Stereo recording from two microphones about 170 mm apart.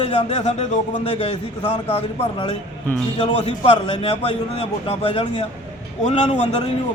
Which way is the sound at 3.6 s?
35° left (ahead or behind).